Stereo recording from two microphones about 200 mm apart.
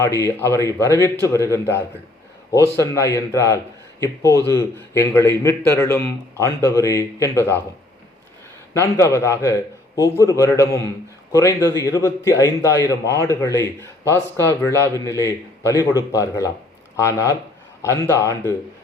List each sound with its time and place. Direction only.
0.0 s a man's voice: 15° left (ahead or behind)
8.7 s a man's voice: 15° left (ahead or behind)